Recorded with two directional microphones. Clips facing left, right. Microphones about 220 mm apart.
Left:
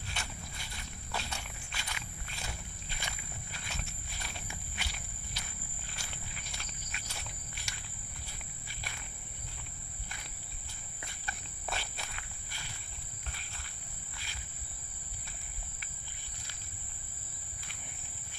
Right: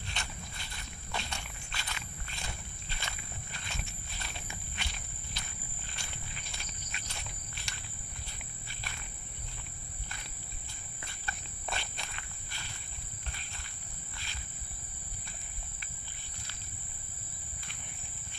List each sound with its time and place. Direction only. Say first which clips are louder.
0.0 s walk: even; 5° left (ahead or behind)
5.9 s wild animals: even; 5° left (ahead or behind)
11.0 s walk: right 1 dB; 5° left (ahead or behind)
14.1 s wild animals: right 1 dB; 10° left (ahead or behind)